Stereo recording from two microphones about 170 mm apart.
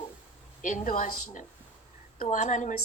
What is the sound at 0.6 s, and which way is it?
A woman's voice, 50° left (ahead or behind).